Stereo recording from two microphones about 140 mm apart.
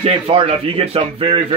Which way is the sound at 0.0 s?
40° right (ahead or behind).